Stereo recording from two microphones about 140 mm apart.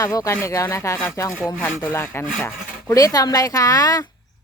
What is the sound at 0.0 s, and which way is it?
Speech, 25° left (ahead or behind).